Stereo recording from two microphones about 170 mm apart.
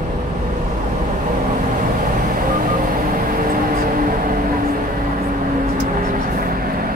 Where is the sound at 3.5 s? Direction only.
55° right (ahead or behind).